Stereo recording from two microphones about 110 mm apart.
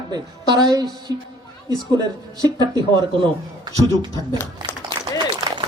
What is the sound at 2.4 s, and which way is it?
Speech, 35° right (ahead or behind).